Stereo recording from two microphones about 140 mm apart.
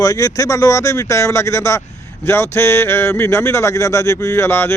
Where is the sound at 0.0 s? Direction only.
25° left (ahead or behind).